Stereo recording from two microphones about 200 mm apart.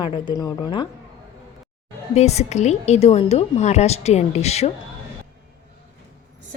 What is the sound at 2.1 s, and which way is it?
A woman's voice, 35° left (ahead or behind).